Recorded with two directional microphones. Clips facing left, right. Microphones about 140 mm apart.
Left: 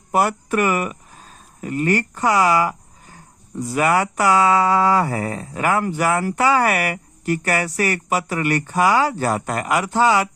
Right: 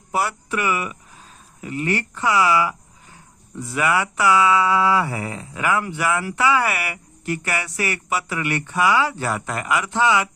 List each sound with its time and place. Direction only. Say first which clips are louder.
0.1 s speech: left 5 dB; 50° left (ahead or behind)